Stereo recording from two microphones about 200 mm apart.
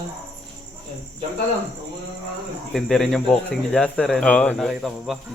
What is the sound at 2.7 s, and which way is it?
Speech, centre (ahead or behind).